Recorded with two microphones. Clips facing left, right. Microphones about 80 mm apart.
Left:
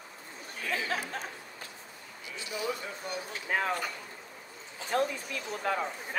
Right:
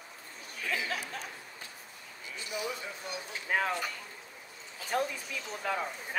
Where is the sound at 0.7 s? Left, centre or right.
Left.